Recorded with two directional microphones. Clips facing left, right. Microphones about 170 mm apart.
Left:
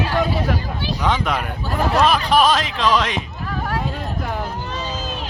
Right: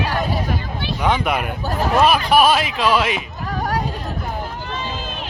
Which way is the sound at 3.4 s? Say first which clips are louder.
Right 3 dB; 40° right (ahead or behind).